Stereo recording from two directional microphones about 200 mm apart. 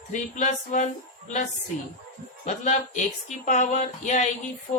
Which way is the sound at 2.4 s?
35° left (ahead or behind).